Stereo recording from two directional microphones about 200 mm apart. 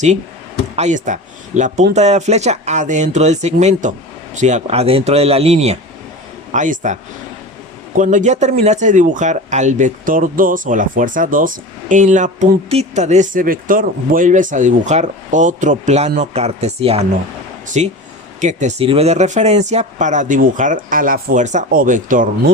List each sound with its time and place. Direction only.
0.8 s speech: 40° right (ahead or behind)